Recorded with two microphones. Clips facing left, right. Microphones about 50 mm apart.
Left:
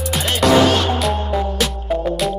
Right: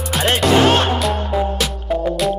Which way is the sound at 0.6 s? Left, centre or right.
Right.